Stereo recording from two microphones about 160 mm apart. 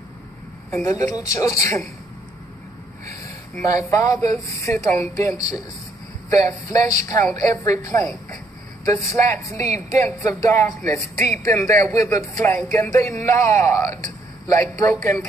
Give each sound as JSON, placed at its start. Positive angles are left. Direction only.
{"t": 0.8, "sound": "speech", "side_deg": 20}
{"t": 3.1, "sound": "a man's voice", "side_deg": 20}